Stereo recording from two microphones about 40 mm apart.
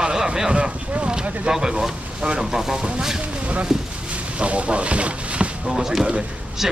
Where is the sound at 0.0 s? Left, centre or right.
Centre.